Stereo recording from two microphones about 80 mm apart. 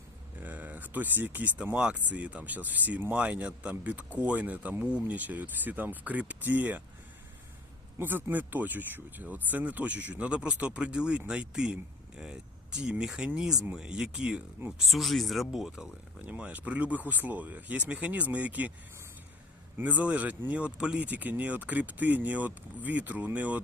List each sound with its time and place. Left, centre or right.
0.3 s speech: right
7.9 s speech: right
14.8 s speech: centre
19.8 s speech: centre